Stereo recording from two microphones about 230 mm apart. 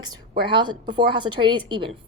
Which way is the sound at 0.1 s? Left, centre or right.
Right.